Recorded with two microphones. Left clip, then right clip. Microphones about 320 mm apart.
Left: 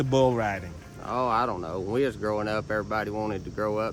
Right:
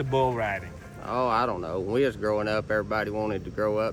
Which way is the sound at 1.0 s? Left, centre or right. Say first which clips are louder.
Even; centre.